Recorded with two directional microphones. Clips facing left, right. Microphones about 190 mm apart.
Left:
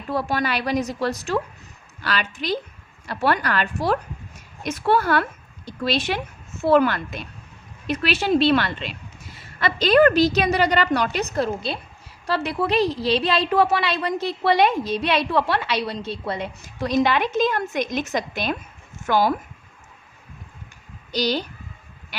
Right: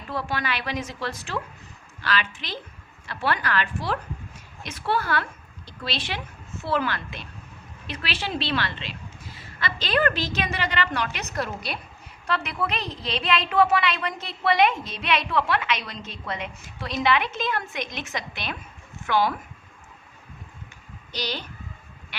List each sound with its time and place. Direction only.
0.1 s a woman's voice: 40° left (ahead or behind)
21.1 s a woman's voice: 40° left (ahead or behind)